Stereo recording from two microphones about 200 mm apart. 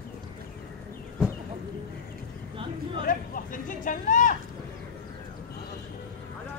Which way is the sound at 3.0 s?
45° left (ahead or behind).